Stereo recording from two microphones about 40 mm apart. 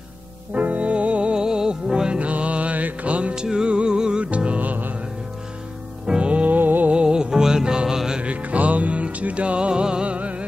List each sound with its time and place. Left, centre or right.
0.5 s music: right
1.3 s music: centre
2.1 s music: right
3.3 s music: centre
4.6 s music: right
6.0 s music: right
6.9 s music: right
8.2 s music: right
10.1 s music: right